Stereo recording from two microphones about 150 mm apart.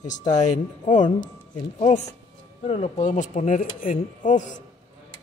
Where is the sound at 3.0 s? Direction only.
55° left (ahead or behind).